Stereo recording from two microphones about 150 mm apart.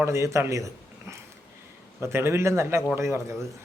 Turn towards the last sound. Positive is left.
turn(degrees=-20)  # may be behind; listen again after turning